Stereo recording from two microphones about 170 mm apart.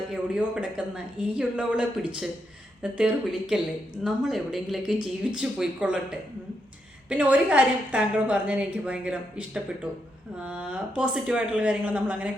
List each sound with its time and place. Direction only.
0.1 s a woman's voice: 5° right (ahead or behind)